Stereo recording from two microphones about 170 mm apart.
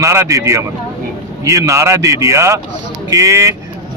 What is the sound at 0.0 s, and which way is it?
A man's voice, 15° right (ahead or behind).